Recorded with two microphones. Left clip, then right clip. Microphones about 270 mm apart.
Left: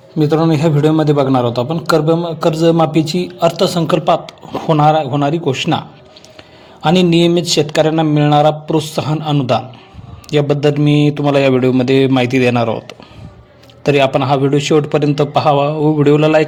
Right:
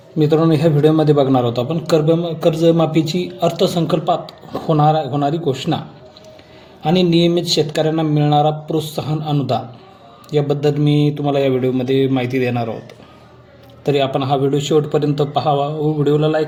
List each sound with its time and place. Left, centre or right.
0.2 s a man's voice: centre
6.8 s a man's voice: left